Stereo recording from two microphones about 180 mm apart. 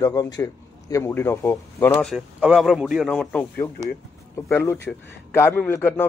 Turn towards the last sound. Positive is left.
turn(degrees=10)  # may be behind; listen again after turning